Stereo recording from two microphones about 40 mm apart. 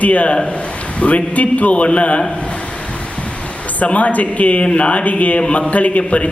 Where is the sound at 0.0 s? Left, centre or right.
Left.